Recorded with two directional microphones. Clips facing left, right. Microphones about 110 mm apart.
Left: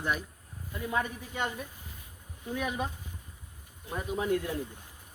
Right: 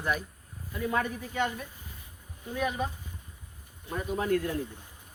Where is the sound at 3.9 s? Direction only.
15° left (ahead or behind).